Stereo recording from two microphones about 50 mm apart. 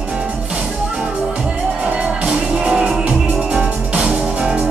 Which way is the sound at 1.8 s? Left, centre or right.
Right.